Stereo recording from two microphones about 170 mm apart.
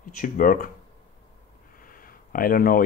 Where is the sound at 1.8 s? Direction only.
55° left (ahead or behind).